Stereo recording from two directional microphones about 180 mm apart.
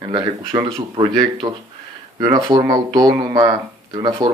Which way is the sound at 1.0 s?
25° right (ahead or behind).